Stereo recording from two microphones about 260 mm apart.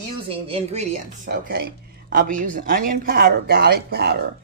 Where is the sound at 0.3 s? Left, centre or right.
Right.